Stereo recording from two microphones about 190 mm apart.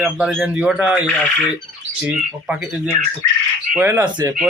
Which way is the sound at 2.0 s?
5° right (ahead or behind).